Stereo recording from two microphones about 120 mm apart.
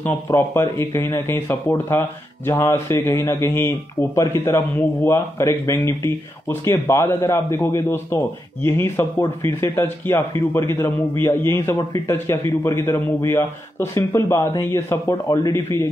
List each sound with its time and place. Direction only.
0.0 s speech: 20° left (ahead or behind)